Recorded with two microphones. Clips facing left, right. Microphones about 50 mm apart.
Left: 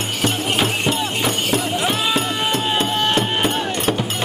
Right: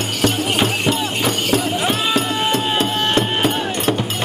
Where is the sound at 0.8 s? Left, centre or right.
Centre.